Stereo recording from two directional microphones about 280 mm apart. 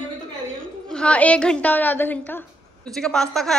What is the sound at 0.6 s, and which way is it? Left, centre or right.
A woman's voice, centre.